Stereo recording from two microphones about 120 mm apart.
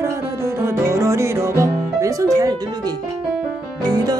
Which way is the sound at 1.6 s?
25° right (ahead or behind).